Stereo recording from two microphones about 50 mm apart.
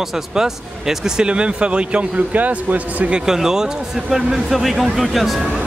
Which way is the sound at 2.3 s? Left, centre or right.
Right.